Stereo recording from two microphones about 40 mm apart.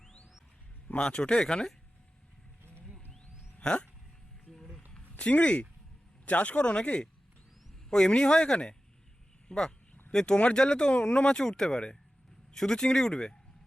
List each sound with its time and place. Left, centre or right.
1.2 s speech: left
3.6 s speech: left
4.5 s a sound: centre
5.1 s speech: left
7.9 s speech: centre
10.3 s speech: left
10.6 s speech: left